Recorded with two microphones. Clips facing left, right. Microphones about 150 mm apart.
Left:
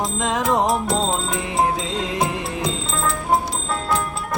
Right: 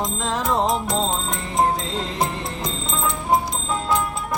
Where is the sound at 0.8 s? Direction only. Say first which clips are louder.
Left 2 dB; 5° left (ahead or behind).